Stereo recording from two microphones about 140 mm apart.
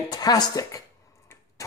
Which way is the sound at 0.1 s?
30° left (ahead or behind).